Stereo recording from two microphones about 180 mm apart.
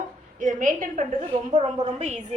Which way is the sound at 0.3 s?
45° right (ahead or behind).